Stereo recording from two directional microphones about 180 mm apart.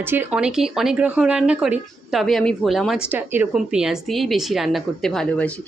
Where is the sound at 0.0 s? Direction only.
10° right (ahead or behind).